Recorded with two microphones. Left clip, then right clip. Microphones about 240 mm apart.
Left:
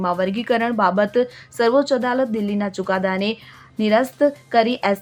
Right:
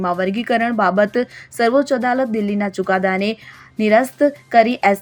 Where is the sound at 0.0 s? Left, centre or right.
Centre.